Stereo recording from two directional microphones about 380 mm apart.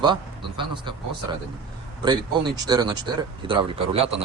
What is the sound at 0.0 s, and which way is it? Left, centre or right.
Speech, centre.